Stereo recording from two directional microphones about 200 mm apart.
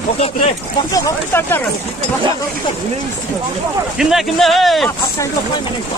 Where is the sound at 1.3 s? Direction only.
10° left (ahead or behind).